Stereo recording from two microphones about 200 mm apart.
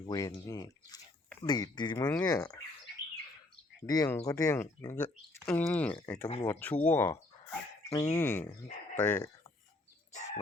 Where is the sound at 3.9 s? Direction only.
20° left (ahead or behind).